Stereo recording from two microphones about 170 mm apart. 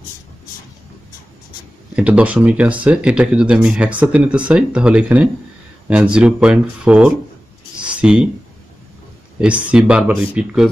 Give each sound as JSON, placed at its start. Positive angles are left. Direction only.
{"t": 2.0, "sound": "speech", "side_deg": -10}
{"t": 9.4, "sound": "speech", "side_deg": -5}